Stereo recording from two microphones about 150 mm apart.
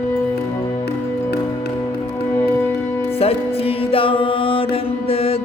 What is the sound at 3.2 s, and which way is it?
Music, 40° left (ahead or behind).